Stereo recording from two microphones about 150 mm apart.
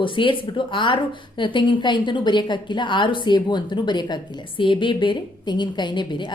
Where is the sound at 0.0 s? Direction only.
35° left (ahead or behind).